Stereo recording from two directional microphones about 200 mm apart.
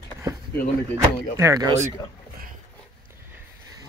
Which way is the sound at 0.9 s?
15° right (ahead or behind).